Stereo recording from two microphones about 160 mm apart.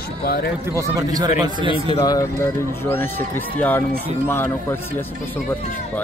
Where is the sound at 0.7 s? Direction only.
20° right (ahead or behind).